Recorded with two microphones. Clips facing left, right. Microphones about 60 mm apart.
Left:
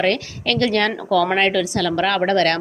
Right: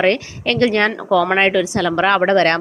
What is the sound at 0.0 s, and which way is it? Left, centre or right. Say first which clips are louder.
A woman's voice: right 3 dB; right.